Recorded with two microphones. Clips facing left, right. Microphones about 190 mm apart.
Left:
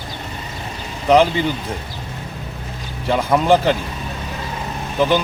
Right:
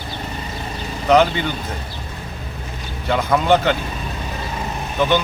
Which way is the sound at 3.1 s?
10° left (ahead or behind).